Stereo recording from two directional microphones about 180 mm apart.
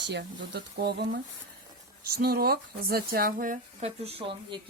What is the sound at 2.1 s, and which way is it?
Speech, 60° right (ahead or behind).